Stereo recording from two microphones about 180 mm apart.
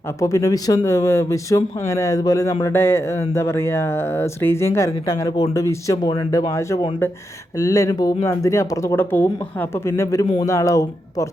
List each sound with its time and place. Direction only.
0.2 s speech: 15° left (ahead or behind)